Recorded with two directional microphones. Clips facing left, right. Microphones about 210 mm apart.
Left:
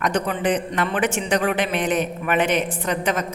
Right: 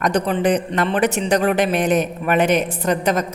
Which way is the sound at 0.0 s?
40° right (ahead or behind).